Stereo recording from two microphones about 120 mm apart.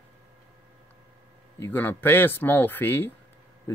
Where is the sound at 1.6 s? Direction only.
20° left (ahead or behind).